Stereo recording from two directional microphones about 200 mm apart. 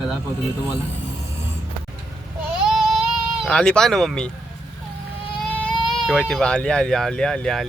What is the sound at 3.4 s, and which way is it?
Speech, 5° left (ahead or behind).